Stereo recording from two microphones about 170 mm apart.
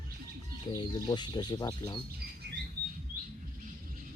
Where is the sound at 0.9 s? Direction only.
25° left (ahead or behind).